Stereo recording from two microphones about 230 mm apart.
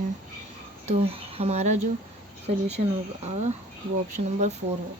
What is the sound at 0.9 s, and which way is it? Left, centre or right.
Speech, right.